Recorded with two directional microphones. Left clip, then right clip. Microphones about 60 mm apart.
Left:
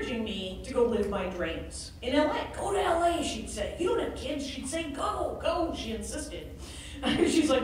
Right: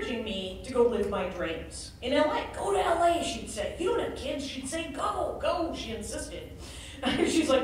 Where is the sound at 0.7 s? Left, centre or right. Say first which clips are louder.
Right 1 dB; centre.